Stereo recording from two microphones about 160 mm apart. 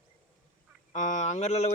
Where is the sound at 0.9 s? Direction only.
45° left (ahead or behind).